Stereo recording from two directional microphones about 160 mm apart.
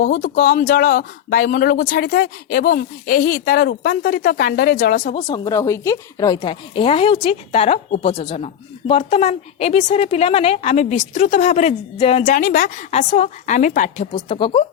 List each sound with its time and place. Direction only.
0.0 s speech: 60° left (ahead or behind)
5.1 s speech: 25° left (ahead or behind)
12.2 s a woman's voice: 55° left (ahead or behind); by 14.6 s 35° left (ahead or behind)